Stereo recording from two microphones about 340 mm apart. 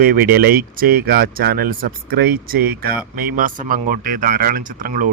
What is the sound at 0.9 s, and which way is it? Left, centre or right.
Speech, right.